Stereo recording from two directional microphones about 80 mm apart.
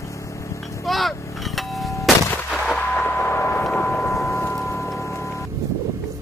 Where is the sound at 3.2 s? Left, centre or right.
Left.